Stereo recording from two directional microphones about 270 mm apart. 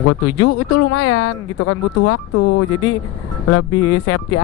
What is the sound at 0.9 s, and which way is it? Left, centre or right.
Speech, left.